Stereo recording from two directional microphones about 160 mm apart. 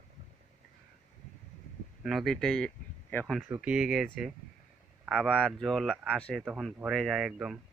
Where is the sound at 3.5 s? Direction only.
10° right (ahead or behind).